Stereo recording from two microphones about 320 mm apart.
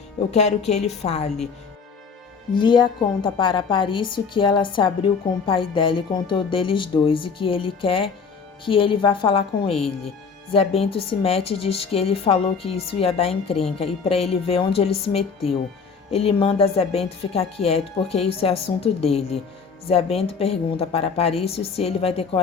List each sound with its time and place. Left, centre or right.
0.3 s speech: centre
2.6 s speech: centre